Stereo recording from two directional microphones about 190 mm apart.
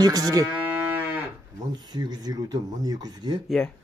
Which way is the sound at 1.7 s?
20° right (ahead or behind).